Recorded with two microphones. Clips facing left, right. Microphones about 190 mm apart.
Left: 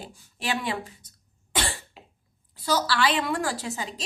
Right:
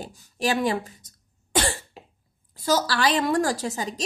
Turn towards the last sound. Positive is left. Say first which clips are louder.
# right 4 dB
turn(degrees=-40)  # may be behind; listen again after turning